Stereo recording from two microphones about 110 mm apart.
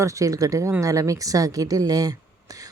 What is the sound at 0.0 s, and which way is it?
Speech, 30° right (ahead or behind).